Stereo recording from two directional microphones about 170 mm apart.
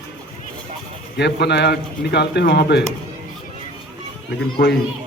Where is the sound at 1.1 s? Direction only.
80° left.